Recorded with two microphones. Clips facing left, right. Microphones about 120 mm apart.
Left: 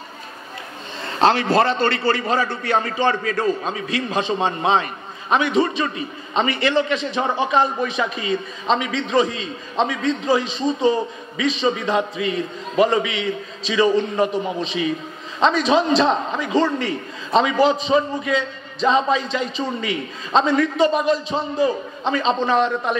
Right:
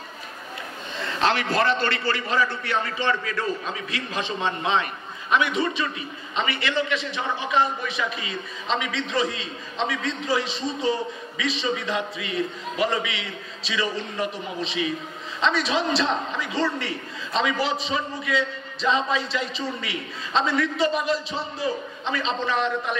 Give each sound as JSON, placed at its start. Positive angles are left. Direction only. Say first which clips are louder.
{"t": 1.0, "sound": "a man's voice", "louder": "left 6 dB", "side_deg": 35}